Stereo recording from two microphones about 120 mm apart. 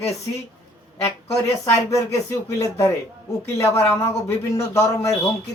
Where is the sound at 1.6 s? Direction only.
25° left (ahead or behind).